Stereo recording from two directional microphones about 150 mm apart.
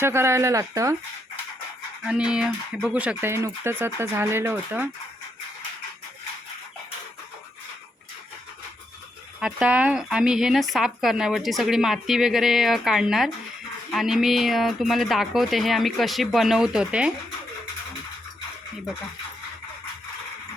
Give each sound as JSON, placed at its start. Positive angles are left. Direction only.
{"t": 0.0, "sound": "speech", "side_deg": -15}
{"t": 2.0, "sound": "speech", "side_deg": -5}
{"t": 9.4, "sound": "speech", "side_deg": -5}